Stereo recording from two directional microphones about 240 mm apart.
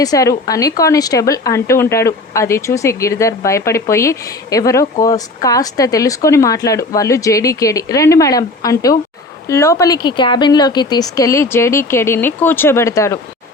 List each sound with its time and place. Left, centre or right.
0.0 s speech: centre